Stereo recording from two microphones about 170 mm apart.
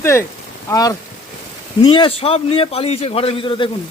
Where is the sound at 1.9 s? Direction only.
35° left (ahead or behind).